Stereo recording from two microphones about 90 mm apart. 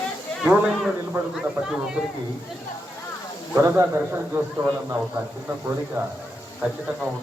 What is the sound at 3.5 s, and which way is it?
A man's voice, 30° right (ahead or behind).